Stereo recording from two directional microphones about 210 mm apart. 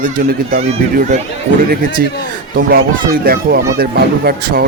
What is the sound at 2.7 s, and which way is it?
Speech, 45° right (ahead or behind).